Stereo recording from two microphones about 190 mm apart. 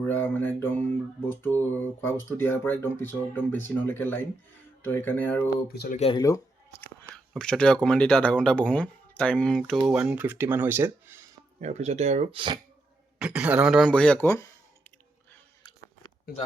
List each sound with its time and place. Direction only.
0.1 s speech: 10° left (ahead or behind)
5.7 s speech: 55° left (ahead or behind)
6.0 s speech: 25° left (ahead or behind)
7.0 s speech: 5° left (ahead or behind); by 11.1 s 10° right (ahead or behind)
11.6 s speech: 35° right (ahead or behind)
13.1 s speech: 5° right (ahead or behind); by 14.5 s 15° left (ahead or behind)